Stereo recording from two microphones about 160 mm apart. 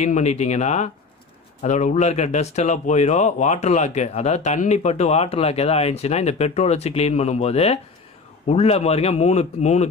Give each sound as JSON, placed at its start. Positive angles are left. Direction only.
{"t": 0.0, "sound": "speech", "side_deg": 45}